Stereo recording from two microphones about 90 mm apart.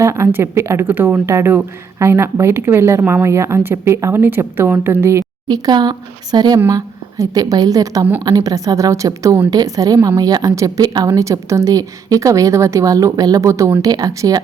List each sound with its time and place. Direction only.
0.0 s speech: 30° right (ahead or behind)
5.5 s a woman's voice: 50° right (ahead or behind)